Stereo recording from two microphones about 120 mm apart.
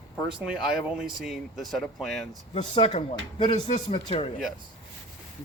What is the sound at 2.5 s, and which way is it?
Speech, 60° left (ahead or behind).